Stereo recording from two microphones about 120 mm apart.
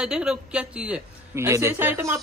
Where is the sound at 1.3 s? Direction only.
25° right (ahead or behind).